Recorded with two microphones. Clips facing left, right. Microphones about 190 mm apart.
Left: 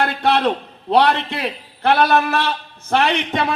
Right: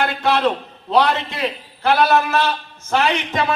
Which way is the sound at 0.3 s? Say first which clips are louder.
Even; 60° left (ahead or behind).